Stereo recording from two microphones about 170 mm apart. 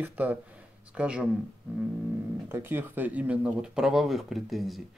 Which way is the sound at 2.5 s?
10° right (ahead or behind).